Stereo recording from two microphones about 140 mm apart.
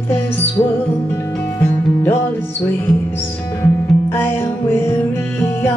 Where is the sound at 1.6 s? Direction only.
15° left (ahead or behind).